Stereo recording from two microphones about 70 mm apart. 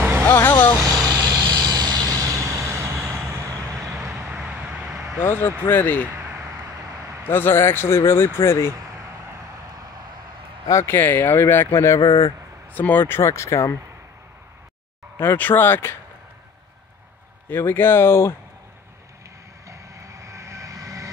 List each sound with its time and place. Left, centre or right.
0.3 s vehicle: left
1.1 s vehicle: right
4.2 s vehicle: centre
5.2 s speech: left
7.2 s speech: left
10.7 s speech: left
11.0 s speech: left
12.7 s speech: left
15.1 s speech: left
17.5 s speech: left
19.7 s train: right